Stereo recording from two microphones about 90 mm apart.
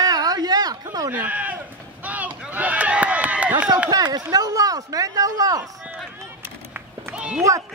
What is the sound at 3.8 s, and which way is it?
Speech, 45° right (ahead or behind).